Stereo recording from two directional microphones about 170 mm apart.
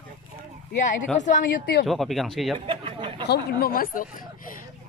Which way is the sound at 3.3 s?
65° left (ahead or behind).